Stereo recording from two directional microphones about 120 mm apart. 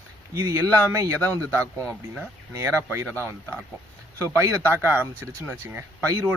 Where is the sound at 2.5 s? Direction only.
25° right (ahead or behind).